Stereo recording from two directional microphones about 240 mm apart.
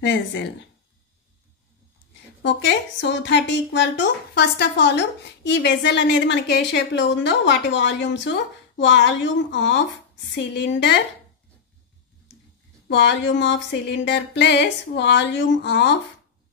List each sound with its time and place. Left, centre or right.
0.0 s speech: left
2.4 s speech: left
12.8 s speech: left